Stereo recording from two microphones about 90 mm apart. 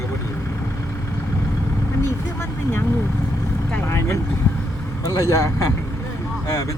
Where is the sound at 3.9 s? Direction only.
30° left (ahead or behind).